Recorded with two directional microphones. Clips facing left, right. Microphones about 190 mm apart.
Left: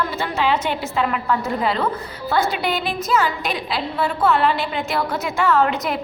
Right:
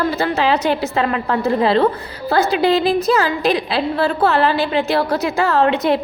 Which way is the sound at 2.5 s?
90° right.